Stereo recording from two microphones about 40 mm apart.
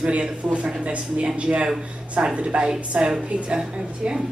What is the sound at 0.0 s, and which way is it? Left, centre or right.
Speech, right.